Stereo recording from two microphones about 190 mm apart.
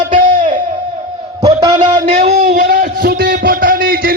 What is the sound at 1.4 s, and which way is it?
Speech, 20° right (ahead or behind).